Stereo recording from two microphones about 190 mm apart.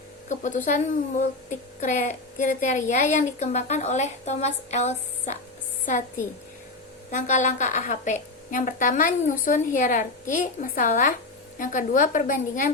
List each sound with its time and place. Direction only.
0.3 s speech: 40° left (ahead or behind)
7.1 s a woman's voice: 40° left (ahead or behind)